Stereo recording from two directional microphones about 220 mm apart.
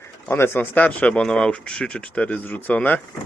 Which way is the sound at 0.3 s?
10° left (ahead or behind).